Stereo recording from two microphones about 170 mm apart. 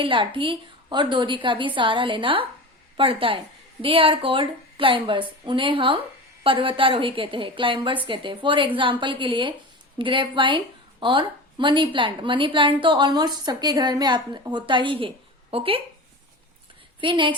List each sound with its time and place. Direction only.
0.0 s a woman's voice: 30° right (ahead or behind)
17.0 s a woman's voice: 30° right (ahead or behind)